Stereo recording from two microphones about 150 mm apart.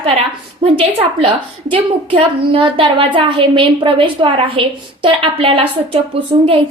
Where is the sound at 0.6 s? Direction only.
40° right (ahead or behind).